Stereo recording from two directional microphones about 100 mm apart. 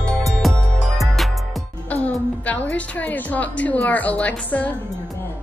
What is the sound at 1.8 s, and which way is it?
Music, 15° left (ahead or behind).